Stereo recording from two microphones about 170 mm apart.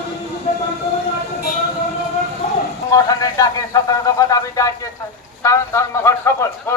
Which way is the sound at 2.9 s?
20° left (ahead or behind).